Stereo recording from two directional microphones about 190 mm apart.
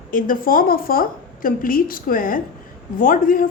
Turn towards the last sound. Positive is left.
turn(degrees=45)  # may be behind; listen again after turning